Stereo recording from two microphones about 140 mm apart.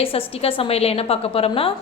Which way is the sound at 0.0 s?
40° left (ahead or behind).